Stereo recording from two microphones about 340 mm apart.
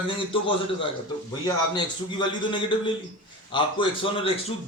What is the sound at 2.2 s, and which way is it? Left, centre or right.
A man's voice, centre.